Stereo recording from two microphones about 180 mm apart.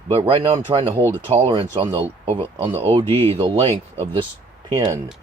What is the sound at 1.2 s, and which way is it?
Speech, 30° right (ahead or behind).